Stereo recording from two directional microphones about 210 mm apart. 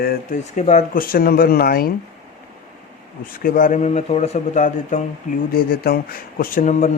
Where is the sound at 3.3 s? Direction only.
45° left (ahead or behind).